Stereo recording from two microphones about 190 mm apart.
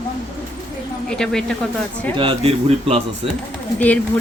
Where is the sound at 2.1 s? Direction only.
25° right (ahead or behind).